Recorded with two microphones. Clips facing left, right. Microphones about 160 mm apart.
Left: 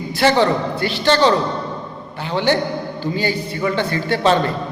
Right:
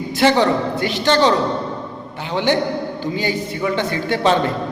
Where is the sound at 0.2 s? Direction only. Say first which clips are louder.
Even; 15° right (ahead or behind).